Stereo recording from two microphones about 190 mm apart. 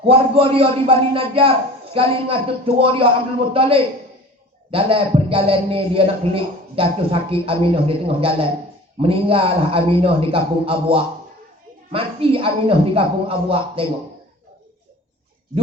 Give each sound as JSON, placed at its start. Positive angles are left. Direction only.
{"t": 0.0, "sound": "a man's voice", "side_deg": -30}